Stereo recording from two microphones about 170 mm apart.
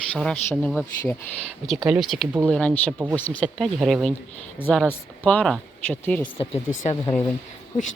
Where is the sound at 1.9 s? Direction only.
Centre (ahead or behind).